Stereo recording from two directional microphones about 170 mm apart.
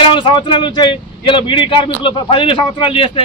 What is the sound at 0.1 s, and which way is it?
Speech, 30° left (ahead or behind).